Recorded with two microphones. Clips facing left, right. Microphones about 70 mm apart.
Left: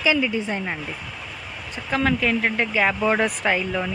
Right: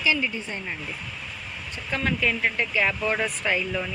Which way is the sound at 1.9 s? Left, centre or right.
Left.